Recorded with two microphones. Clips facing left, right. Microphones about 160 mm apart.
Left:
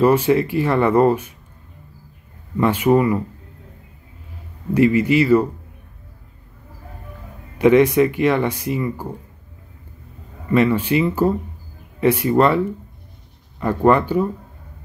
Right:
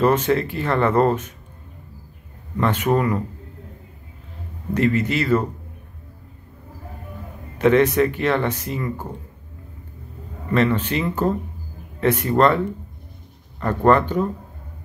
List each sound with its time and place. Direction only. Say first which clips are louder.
0.0 s speech: left 3 dB; 10° left (ahead or behind)
2.5 s speech: left 4 dB; 10° left (ahead or behind)
4.7 s speech: left 5 dB; 10° left (ahead or behind)
7.5 s speech: left 3 dB; 10° left (ahead or behind)
10.5 s speech: left 3 dB; 10° left (ahead or behind)
13.6 s speech: left 1 dB; 10° left (ahead or behind)